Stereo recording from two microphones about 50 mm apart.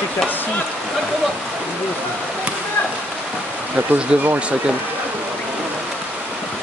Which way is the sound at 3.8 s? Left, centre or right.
Right.